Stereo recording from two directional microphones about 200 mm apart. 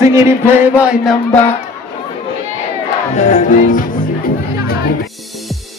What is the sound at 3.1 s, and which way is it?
Music, 35° left (ahead or behind).